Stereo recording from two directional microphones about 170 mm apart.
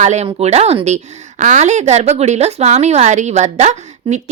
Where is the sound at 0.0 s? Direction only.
45° right (ahead or behind).